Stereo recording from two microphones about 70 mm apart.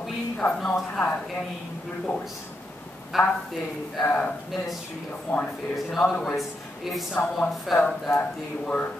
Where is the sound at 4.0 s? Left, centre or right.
Left.